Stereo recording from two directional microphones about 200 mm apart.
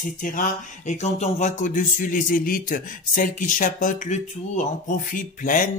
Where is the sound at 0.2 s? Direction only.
40° left (ahead or behind).